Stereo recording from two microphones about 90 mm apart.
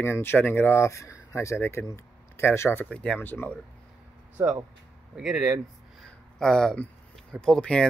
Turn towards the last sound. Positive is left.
turn(degrees=10)  # may be behind; listen again after turning